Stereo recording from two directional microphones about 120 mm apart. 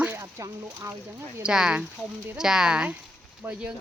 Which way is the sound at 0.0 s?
20° right (ahead or behind).